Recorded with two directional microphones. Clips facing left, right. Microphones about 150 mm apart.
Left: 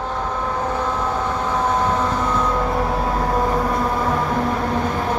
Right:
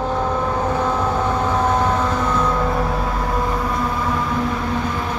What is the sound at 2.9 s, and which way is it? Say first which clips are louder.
Vehicle: left 2 dB; 35° left (ahead or behind).